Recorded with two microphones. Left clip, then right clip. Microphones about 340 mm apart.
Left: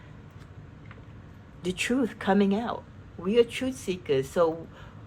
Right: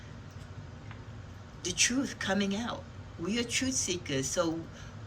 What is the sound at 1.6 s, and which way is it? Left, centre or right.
A woman's voice, centre.